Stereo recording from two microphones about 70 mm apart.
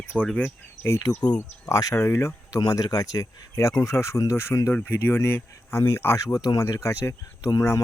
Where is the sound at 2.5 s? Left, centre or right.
Left.